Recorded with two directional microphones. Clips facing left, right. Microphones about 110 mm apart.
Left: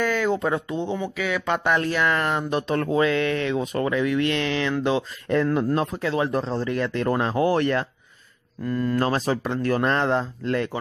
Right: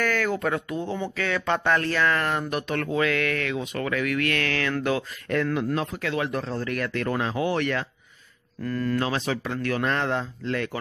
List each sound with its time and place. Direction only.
0.0 s speech: 20° left (ahead or behind)
0.9 s speech: 10° left (ahead or behind)
5.5 s speech: 35° left (ahead or behind)
8.6 s speech: 20° left (ahead or behind)
8.9 s speech: 40° left (ahead or behind)